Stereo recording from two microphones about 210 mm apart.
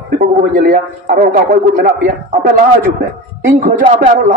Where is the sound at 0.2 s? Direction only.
45° right (ahead or behind).